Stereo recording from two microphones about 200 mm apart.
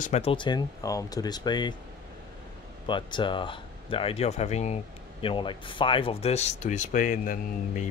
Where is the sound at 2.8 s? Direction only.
25° left (ahead or behind).